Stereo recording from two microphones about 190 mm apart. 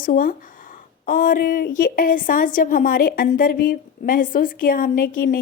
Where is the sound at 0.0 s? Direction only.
50° left (ahead or behind).